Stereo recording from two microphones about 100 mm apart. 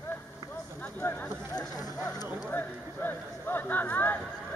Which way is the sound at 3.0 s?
20° left (ahead or behind).